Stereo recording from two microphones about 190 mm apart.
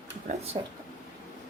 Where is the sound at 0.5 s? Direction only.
35° right (ahead or behind).